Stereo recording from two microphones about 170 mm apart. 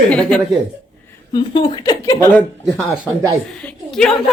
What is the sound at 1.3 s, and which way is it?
Speech, 25° left (ahead or behind).